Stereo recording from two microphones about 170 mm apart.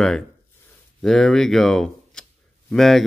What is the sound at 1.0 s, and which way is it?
Speech, centre (ahead or behind).